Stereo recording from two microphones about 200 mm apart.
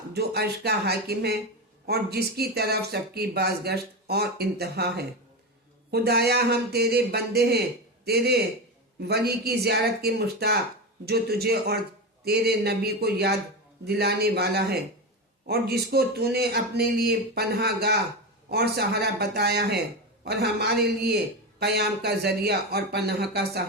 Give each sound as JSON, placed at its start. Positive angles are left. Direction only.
{"t": 0.1, "sound": "speech", "side_deg": -55}